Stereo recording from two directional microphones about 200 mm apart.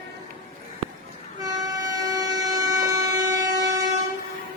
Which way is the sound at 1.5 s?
20° right (ahead or behind).